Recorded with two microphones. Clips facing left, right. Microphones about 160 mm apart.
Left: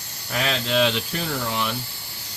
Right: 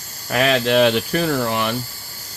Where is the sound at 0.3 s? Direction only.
60° right (ahead or behind).